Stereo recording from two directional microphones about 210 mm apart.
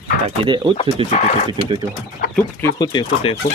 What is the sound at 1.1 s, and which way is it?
Speech, 35° left (ahead or behind).